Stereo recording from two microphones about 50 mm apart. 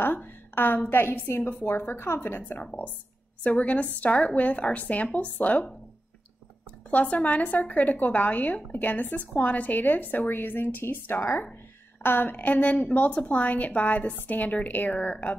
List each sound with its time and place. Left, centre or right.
0.0 s a sound: left
0.8 s a woman's voice: left
3.4 s a woman's voice: left
6.9 s a woman's voice: left